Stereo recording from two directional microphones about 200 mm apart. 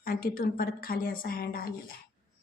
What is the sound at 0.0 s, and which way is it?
A woman's voice, 45° left (ahead or behind).